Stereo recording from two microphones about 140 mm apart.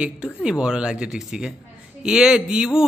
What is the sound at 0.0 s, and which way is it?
A man's voice, 5° right (ahead or behind).